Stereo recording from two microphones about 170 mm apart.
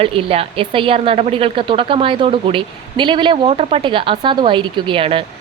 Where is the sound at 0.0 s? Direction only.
35° right (ahead or behind).